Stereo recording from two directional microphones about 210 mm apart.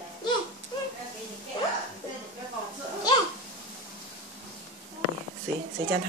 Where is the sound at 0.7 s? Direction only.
20° left (ahead or behind).